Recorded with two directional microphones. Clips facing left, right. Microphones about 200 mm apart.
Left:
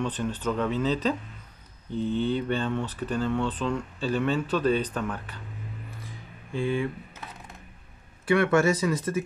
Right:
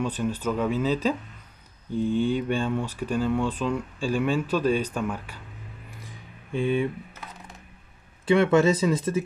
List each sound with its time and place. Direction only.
0.0 s speech: 10° right (ahead or behind)
6.5 s speech: 20° right (ahead or behind)
8.3 s speech: 20° right (ahead or behind)